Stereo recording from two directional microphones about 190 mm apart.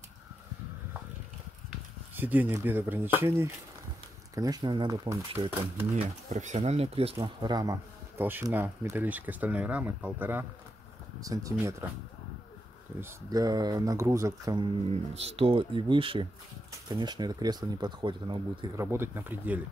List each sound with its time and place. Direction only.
2.1 s speech: 10° right (ahead or behind)
13.0 s speech: 20° right (ahead or behind)
15.1 s speech: 30° right (ahead or behind)
18.9 s speech: 10° right (ahead or behind)